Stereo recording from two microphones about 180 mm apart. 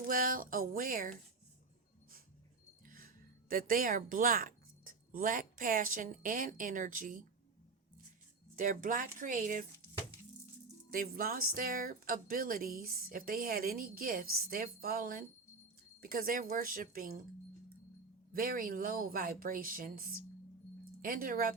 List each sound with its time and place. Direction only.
0.1 s speech: 50° right (ahead or behind)
2.8 s music: 50° right (ahead or behind)
3.5 s speech: 50° right (ahead or behind)
8.5 s speech: 45° right (ahead or behind)
10.9 s speech: 50° right (ahead or behind)
18.3 s speech: 50° right (ahead or behind)